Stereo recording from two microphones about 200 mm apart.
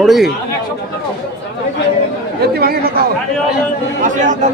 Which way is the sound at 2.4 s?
50° right (ahead or behind).